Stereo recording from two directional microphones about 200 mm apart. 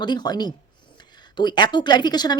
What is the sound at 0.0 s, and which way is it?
A woman's voice, 20° left (ahead or behind).